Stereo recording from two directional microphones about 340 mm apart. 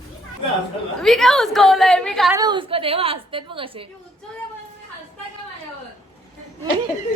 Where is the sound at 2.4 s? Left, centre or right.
Centre.